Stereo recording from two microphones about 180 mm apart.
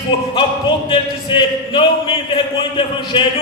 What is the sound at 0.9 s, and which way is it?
Speech, 25° left (ahead or behind).